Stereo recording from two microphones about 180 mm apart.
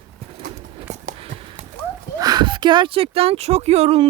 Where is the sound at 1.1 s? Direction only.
35° right (ahead or behind).